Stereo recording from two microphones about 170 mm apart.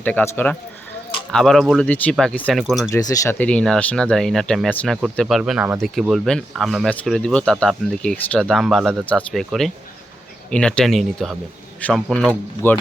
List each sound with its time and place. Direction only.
0.0 s speech: 10° left (ahead or behind)
2.9 s speech: 20° left (ahead or behind)
3.3 s speech: 5° left (ahead or behind)
12.6 s speech: 15° left (ahead or behind)